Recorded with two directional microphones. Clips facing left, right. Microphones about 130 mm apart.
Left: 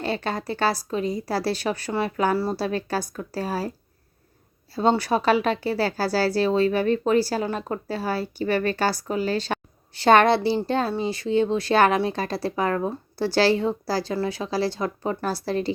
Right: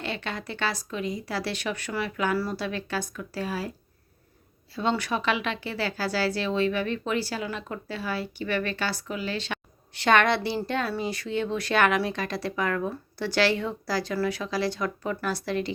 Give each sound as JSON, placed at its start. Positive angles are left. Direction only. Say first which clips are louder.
{"t": 0.0, "sound": "a woman's voice", "louder": "left 6 dB", "side_deg": 35}
{"t": 4.7, "sound": "a woman's voice", "louder": "left 6 dB", "side_deg": 35}